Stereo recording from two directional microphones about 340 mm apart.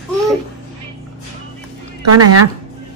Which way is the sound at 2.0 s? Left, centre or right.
Right.